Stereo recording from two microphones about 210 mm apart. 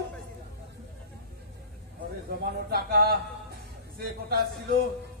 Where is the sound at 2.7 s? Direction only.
45° right (ahead or behind).